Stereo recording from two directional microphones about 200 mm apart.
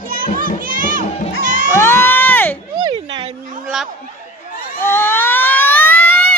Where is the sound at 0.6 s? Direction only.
45° right (ahead or behind).